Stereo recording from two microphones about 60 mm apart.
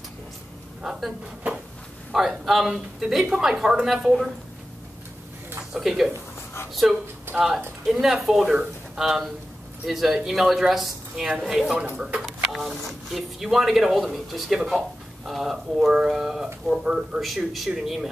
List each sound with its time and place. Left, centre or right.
2.1 s speech: centre
5.7 s speech: centre
11.7 s speech: centre
12.2 s speech: centre
17.2 s speech: centre